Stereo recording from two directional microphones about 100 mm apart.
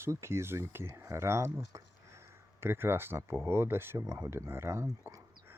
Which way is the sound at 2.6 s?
25° right (ahead or behind).